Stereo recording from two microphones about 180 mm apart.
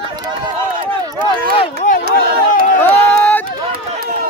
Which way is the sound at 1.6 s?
40° left (ahead or behind).